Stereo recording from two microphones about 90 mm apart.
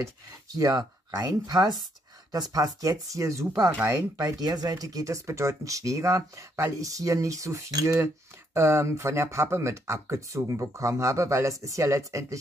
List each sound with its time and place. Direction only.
0.6 s speech: 40° right (ahead or behind)